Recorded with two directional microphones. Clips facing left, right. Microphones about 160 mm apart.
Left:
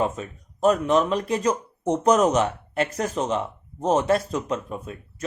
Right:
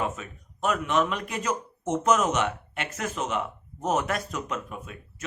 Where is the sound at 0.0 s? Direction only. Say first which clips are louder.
Left 5 dB; 35° left (ahead or behind).